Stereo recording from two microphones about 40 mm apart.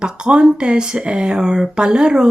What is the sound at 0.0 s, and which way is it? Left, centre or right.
A woman's voice, centre.